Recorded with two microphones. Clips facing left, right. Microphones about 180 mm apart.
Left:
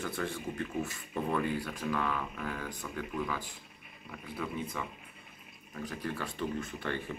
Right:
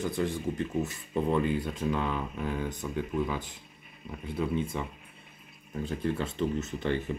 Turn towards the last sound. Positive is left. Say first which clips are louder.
# right 6 dB
turn(degrees=-20)  # may be behind; listen again after turning